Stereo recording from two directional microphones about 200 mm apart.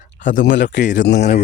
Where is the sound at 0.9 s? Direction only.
60° left (ahead or behind).